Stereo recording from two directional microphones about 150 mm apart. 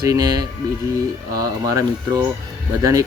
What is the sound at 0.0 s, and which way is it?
Speech, 25° right (ahead or behind).